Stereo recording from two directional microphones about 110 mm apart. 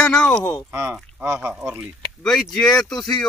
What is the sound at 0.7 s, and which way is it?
Speech, 25° right (ahead or behind).